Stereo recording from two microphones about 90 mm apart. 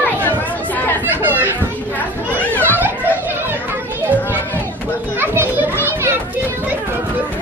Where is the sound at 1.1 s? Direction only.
20° right (ahead or behind).